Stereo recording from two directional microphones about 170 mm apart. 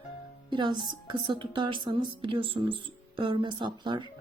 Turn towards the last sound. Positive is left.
turn(degrees=-25)  # may be behind; listen again after turning